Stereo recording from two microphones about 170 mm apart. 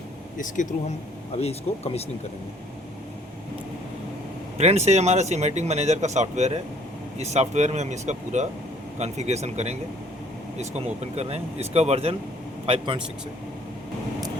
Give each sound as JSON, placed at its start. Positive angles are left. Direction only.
{"t": 0.3, "sound": "speech", "side_deg": 50}
{"t": 1.4, "sound": "speech", "side_deg": 40}
{"t": 4.5, "sound": "a man's voice", "side_deg": -40}